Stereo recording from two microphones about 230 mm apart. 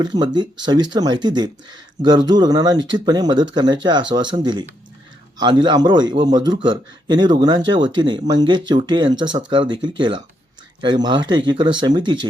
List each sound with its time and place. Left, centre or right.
0.0 s speech: centre